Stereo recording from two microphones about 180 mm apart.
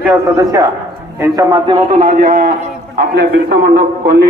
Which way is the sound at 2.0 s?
45° right (ahead or behind).